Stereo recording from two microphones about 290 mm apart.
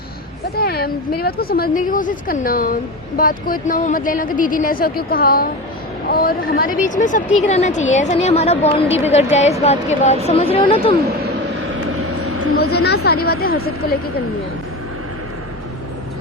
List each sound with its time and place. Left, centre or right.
0.5 s a sound: left
1.2 s a woman's voice: left
12.7 s speech: left